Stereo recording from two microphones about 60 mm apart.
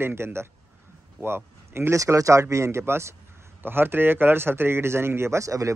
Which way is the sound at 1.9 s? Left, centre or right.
Right.